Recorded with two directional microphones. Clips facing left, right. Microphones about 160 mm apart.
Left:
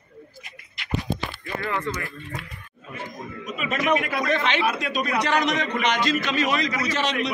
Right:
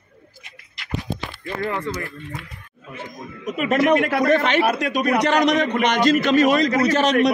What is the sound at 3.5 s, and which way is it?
A man's voice, 65° right (ahead or behind).